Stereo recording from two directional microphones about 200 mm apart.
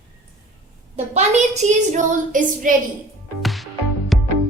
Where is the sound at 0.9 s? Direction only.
35° right (ahead or behind).